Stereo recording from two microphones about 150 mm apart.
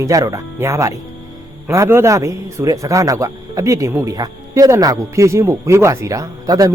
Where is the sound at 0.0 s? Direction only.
25° right (ahead or behind).